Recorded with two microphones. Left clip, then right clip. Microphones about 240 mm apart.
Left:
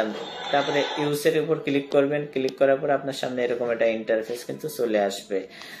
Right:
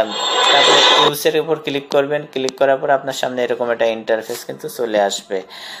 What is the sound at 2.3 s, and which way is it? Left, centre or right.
Speech, centre.